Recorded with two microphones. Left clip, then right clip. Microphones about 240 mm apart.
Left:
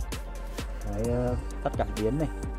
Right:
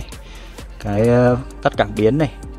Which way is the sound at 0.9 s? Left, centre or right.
Centre.